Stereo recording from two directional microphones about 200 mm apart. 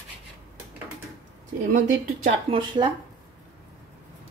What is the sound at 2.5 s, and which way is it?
Speech, 25° right (ahead or behind).